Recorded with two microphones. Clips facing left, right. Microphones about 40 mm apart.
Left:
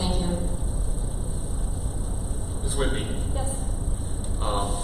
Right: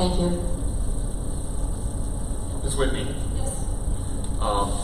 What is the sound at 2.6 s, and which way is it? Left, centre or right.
Speech, centre.